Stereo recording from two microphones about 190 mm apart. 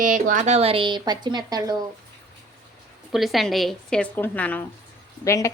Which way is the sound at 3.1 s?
Centre (ahead or behind).